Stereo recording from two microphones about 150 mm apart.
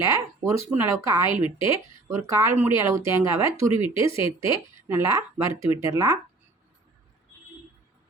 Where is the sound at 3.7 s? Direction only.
35° left (ahead or behind).